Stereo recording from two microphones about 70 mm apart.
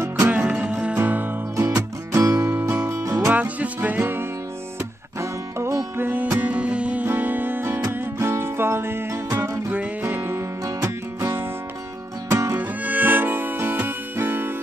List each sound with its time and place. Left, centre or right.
0.3 s music: centre
0.9 s music: right
1.6 s music: right
3.3 s music: right
5.9 s music: right
12.5 s music: right